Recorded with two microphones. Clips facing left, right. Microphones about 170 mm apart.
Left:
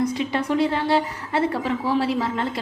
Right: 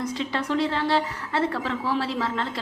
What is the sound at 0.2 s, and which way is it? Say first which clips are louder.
A woman's voice: left 4 dB; 15° left (ahead or behind).